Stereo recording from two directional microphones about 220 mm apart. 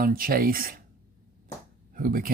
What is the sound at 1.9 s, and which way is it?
Speech, 40° right (ahead or behind).